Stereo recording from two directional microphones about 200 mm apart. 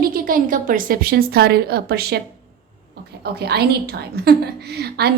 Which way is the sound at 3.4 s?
55° right (ahead or behind).